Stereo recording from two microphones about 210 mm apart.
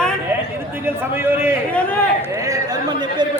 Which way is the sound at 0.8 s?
10° right (ahead or behind).